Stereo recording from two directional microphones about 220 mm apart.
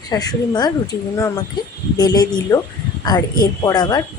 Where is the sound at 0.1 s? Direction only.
15° left (ahead or behind).